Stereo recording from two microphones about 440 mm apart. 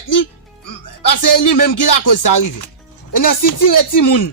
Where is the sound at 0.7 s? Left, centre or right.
Left.